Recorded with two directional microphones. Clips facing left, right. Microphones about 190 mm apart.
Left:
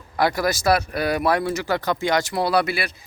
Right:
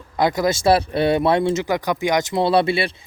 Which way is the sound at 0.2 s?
20° right (ahead or behind).